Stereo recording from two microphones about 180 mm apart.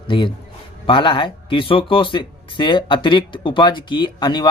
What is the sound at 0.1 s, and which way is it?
Speech, 30° left (ahead or behind).